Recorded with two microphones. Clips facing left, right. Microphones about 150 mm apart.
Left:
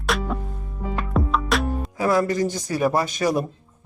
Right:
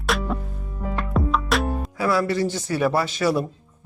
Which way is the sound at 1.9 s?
40° left (ahead or behind).